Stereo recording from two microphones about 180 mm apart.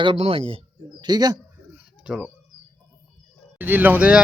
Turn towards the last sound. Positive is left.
turn(degrees=-10)  # may be behind; listen again after turning